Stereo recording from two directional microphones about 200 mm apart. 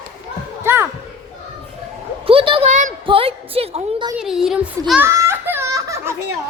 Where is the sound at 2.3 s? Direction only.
25° right (ahead or behind).